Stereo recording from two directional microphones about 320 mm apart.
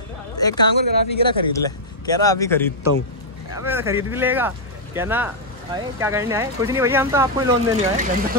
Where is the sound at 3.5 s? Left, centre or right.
Centre.